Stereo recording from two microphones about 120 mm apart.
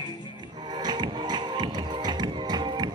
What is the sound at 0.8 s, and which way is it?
Music, 35° right (ahead or behind).